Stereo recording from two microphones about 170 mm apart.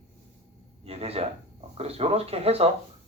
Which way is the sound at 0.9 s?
35° right (ahead or behind).